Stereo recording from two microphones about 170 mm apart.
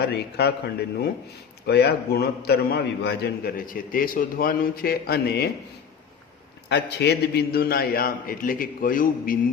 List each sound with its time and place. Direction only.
0.0 s a man's voice: 75° left (ahead or behind)
1.6 s a man's voice: 70° left (ahead or behind)
6.7 s a man's voice: 85° left; by 9.4 s 55° left (ahead or behind)